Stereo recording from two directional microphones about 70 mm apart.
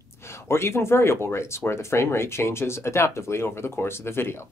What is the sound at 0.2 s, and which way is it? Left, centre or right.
Speech, left.